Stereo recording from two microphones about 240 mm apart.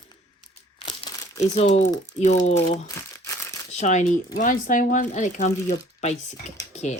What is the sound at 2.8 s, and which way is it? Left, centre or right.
Crumpling, centre.